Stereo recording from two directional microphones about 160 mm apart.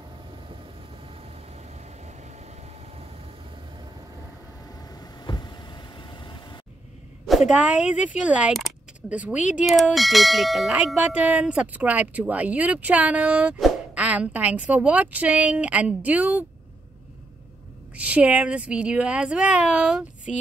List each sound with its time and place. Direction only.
2.0 s vehicle: 45° right (ahead or behind)
4.7 s vehicle: 25° left (ahead or behind)
7.2 s speech: 5° right (ahead or behind)
17.9 s speech: 10° right (ahead or behind)